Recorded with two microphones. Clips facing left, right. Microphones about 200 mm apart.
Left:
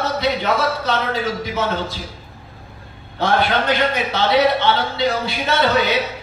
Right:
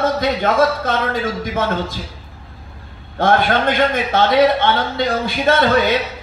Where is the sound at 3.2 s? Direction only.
50° right (ahead or behind).